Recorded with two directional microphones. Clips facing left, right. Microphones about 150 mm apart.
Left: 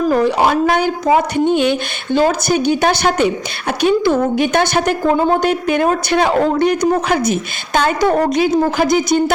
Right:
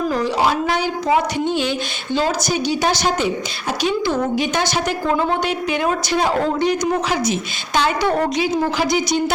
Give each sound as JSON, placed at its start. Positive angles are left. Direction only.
{"t": 0.1, "sound": "a woman's voice", "side_deg": 60}
{"t": 5.0, "sound": "a woman's voice", "side_deg": 40}
{"t": 6.1, "sound": "a woman's voice", "side_deg": 65}